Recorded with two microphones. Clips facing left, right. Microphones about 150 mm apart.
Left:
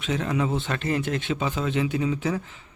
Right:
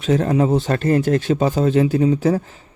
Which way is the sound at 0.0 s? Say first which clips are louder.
Right 9 dB; 40° right (ahead or behind).